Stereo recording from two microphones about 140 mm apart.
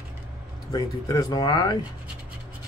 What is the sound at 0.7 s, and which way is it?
Speech, 25° left (ahead or behind).